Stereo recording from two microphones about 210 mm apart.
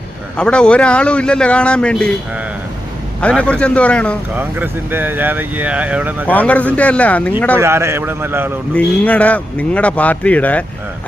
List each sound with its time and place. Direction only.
0.3 s a man's voice: 5° left (ahead or behind)
3.2 s a man's voice: 5° left (ahead or behind)
4.4 s speech: 10° right (ahead or behind)
6.2 s speech: 5° left (ahead or behind)
7.6 s speech: 15° right (ahead or behind)
8.7 s speech: 5° left (ahead or behind)